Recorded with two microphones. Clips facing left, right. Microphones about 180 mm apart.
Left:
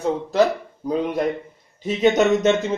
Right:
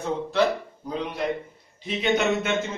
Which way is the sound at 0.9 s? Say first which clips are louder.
Left 6 dB; 45° left (ahead or behind).